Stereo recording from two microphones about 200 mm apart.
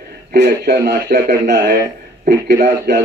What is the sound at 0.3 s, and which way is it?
Speech, 55° right (ahead or behind).